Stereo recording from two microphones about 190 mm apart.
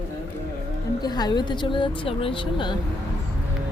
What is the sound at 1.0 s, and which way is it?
Speech, 20° left (ahead or behind).